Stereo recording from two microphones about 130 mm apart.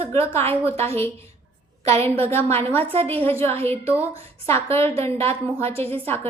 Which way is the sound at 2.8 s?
45° right (ahead or behind).